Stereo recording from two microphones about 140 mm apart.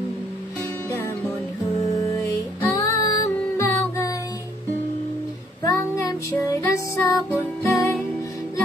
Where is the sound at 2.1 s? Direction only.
20° left (ahead or behind).